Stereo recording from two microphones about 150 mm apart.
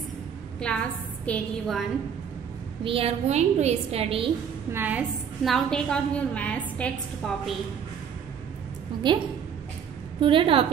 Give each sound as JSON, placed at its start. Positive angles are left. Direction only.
{"t": 0.7, "sound": "a woman's voice", "side_deg": 5}
{"t": 2.8, "sound": "a woman's voice", "side_deg": -40}
{"t": 4.7, "sound": "a woman's voice", "side_deg": -10}
{"t": 5.4, "sound": "a woman's voice", "side_deg": 5}
{"t": 9.0, "sound": "a woman's voice", "side_deg": -30}
{"t": 10.2, "sound": "a woman's voice", "side_deg": -35}